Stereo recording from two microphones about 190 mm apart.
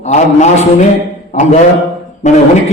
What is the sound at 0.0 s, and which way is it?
A man's voice, 40° left (ahead or behind).